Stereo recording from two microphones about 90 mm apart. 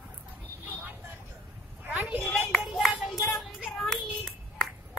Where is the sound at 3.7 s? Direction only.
Centre (ahead or behind).